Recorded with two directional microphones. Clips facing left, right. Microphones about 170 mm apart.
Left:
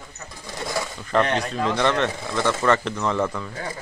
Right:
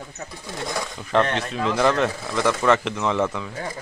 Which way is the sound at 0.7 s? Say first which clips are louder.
Left 2 dB; centre (ahead or behind).